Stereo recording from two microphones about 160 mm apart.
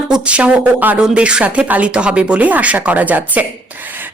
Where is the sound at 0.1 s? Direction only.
5° right (ahead or behind).